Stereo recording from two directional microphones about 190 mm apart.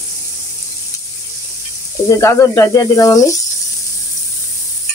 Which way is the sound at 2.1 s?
15° left (ahead or behind).